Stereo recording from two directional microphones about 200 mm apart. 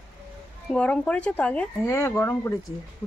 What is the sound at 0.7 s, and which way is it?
Speech, 5° left (ahead or behind).